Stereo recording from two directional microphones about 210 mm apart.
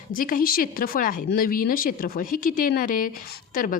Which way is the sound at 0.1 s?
40° left (ahead or behind).